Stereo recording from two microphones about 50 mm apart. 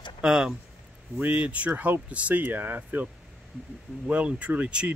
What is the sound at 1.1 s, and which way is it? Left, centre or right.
Speech, right.